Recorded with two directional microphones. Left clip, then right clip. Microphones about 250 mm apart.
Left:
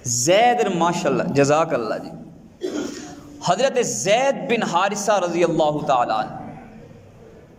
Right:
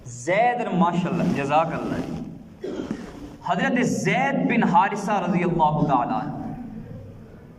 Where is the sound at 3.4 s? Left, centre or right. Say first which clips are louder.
Left 4 dB; left.